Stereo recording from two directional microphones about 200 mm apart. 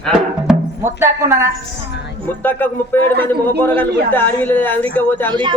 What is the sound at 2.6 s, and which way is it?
A man's voice, 10° left (ahead or behind).